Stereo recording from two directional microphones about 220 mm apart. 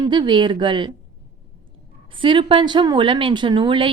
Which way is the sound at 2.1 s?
25° right (ahead or behind).